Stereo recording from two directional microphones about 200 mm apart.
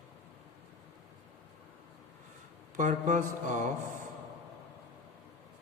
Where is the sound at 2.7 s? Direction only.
40° right (ahead or behind).